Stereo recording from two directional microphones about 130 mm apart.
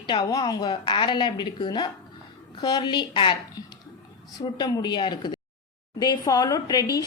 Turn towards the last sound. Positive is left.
turn(degrees=30)  # may be behind; listen again after turning